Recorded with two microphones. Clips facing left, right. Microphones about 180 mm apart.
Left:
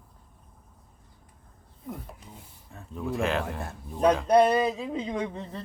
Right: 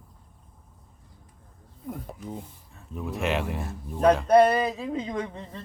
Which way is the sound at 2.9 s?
Centre (ahead or behind).